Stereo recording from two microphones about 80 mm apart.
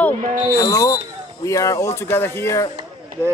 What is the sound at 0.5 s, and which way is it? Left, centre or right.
Speech, left.